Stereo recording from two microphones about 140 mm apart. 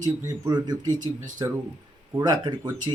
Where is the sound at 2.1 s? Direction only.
30° right (ahead or behind).